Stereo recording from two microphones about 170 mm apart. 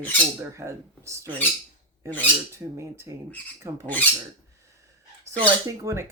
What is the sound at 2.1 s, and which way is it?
Speech, 10° left (ahead or behind).